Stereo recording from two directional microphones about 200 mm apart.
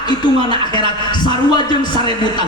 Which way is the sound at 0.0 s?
20° left (ahead or behind).